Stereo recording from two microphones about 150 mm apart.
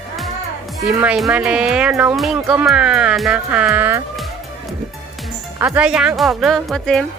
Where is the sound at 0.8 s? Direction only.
5° right (ahead or behind).